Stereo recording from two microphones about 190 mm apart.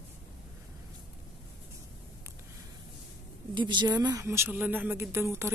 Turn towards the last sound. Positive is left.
turn(degrees=-15)  # may be behind; listen again after turning